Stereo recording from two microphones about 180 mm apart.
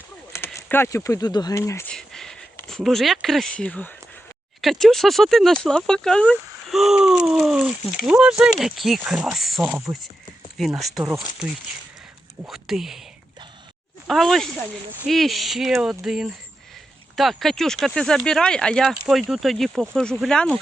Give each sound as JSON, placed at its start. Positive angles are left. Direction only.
{"t": 0.3, "sound": "speech", "side_deg": 15}
{"t": 1.9, "sound": "a sound", "side_deg": 5}
{"t": 4.6, "sound": "speech", "side_deg": 0}
{"t": 12.5, "sound": "speech", "side_deg": 0}
{"t": 14.1, "sound": "speech", "side_deg": 0}